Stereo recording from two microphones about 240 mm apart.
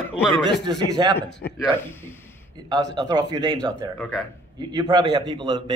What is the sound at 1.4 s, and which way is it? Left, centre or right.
Speech, left.